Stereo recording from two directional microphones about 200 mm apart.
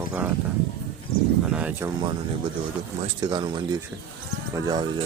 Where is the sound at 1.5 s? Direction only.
10° right (ahead or behind).